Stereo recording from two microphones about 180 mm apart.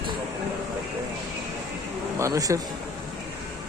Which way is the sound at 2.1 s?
15° right (ahead or behind).